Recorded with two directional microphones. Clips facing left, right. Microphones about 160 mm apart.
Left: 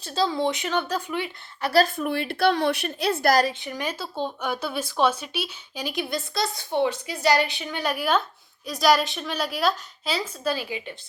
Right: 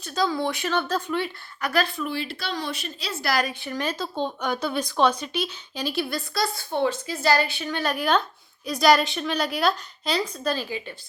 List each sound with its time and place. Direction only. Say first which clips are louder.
0.0 s speech: left 1 dB; 30° left (ahead or behind); by 1.3 s 15° left (ahead or behind)
1.6 s a woman's voice: left 4 dB; 35° left (ahead or behind)
2.0 s a woman's voice: left 5 dB; 55° left (ahead or behind)
3.6 s a woman's voice: right 2 dB; 15° left (ahead or behind)